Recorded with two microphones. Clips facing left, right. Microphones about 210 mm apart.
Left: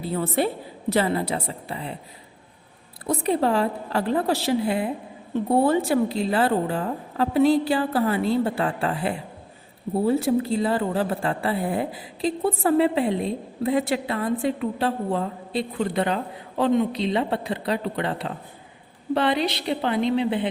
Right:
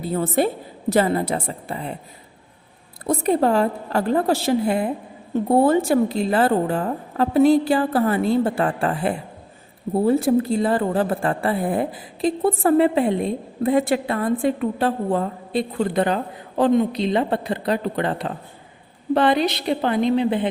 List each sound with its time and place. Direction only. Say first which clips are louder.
0.1 s a woman's voice: right 3 dB; 45° right (ahead or behind)
3.1 s a woman's voice: right 3 dB; 45° right (ahead or behind)